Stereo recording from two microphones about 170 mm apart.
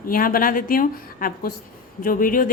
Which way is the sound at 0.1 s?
55° left (ahead or behind).